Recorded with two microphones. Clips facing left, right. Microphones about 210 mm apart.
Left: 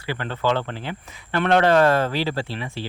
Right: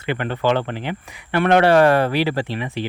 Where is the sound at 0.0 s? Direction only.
20° right (ahead or behind).